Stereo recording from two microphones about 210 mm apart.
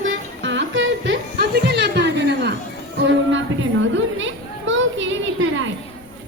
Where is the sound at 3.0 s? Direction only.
60° right (ahead or behind).